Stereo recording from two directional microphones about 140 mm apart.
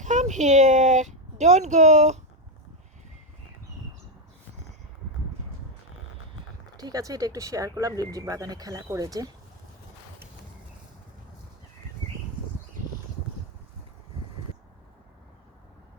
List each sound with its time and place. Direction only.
0.0 s speech: 60° right (ahead or behind)
6.7 s speech: 25° right (ahead or behind)